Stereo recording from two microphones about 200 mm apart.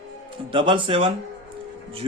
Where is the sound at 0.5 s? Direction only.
25° right (ahead or behind).